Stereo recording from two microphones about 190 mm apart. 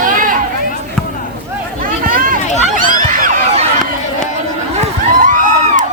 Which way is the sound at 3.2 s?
40° right (ahead or behind).